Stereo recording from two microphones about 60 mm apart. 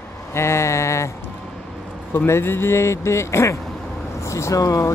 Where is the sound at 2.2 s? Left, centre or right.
Left.